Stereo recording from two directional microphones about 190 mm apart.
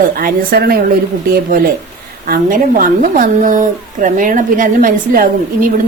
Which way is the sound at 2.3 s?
45° right (ahead or behind).